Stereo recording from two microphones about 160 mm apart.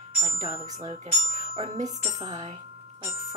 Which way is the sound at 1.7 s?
50° right (ahead or behind).